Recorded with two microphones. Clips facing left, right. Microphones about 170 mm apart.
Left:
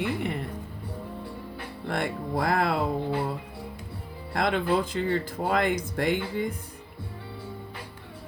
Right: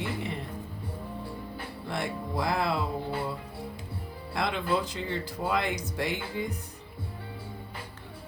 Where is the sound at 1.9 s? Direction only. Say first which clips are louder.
Left 4 dB; 55° left (ahead or behind).